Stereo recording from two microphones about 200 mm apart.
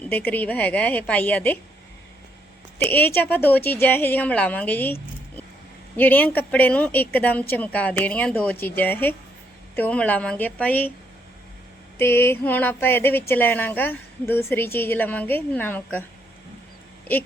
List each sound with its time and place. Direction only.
0.1 s speech: 10° left (ahead or behind)
2.7 s speech: 10° left (ahead or behind)
6.0 s speech: 10° left (ahead or behind)
11.9 s speech: 10° left (ahead or behind)